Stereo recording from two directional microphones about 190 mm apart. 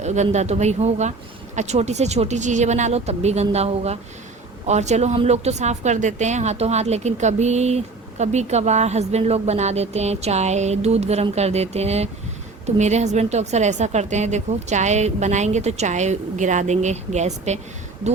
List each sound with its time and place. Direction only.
0.0 s a woman's voice: 35° right (ahead or behind)